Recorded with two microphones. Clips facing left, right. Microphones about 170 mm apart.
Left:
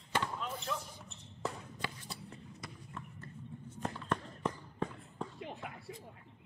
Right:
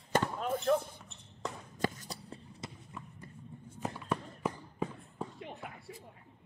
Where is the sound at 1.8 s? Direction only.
45° right (ahead or behind).